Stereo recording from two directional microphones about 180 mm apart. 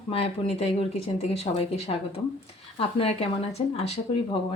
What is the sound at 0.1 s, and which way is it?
Speech, 35° left (ahead or behind).